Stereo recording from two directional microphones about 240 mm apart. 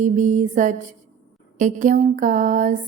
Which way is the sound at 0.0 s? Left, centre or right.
Right.